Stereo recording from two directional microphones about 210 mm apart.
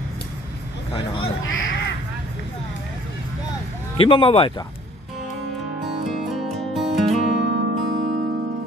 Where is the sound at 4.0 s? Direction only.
25° left (ahead or behind).